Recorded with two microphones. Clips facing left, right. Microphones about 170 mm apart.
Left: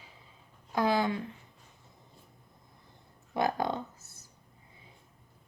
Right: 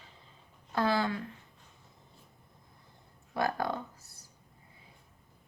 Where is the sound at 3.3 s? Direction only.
20° left (ahead or behind).